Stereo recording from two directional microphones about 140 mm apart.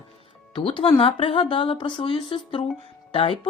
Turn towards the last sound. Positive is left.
turn(degrees=40)  # may be behind; listen again after turning